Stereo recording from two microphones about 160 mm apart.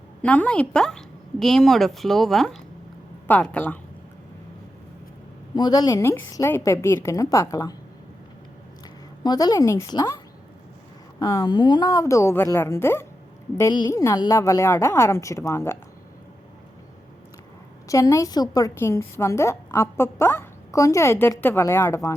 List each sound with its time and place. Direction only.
0.2 s a woman's voice: 10° left (ahead or behind)
5.5 s a woman's voice: 25° left (ahead or behind)
9.2 s a woman's voice: 25° left (ahead or behind)
11.2 s a woman's voice: 20° left (ahead or behind)
13.6 s a woman's voice: 25° left (ahead or behind)
17.8 s a woman's voice: 20° left (ahead or behind)